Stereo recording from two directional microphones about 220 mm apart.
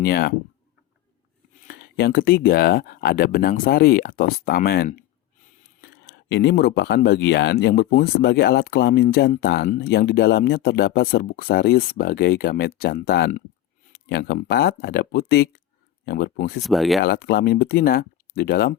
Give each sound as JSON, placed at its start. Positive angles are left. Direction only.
{"t": 0.0, "sound": "speech", "side_deg": 45}
{"t": 1.6, "sound": "speech", "side_deg": 45}
{"t": 16.6, "sound": "speech", "side_deg": 0}
{"t": 17.0, "sound": "speech", "side_deg": 45}